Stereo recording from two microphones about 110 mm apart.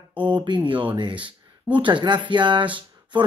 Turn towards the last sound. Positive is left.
turn(degrees=-50)  # may be behind; listen again after turning